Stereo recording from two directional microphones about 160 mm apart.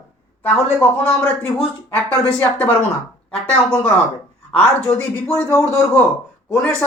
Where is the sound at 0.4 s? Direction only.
10° left (ahead or behind).